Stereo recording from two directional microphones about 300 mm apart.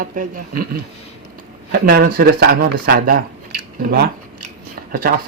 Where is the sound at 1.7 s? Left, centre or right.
Right.